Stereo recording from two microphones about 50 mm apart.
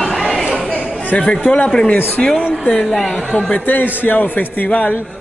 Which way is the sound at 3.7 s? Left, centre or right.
Left.